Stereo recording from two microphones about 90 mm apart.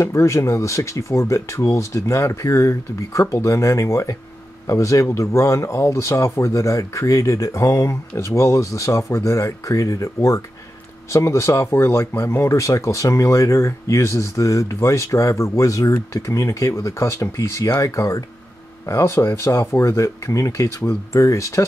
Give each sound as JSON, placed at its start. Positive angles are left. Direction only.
{"t": 0.0, "sound": "speech", "side_deg": 35}